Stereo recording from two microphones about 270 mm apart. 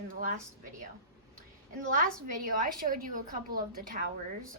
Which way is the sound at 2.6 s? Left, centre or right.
Right.